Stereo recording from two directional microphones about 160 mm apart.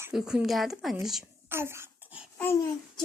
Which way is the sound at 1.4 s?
15° right (ahead or behind).